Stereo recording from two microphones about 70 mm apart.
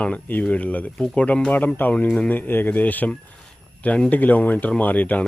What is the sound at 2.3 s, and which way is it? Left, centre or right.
Speech, left.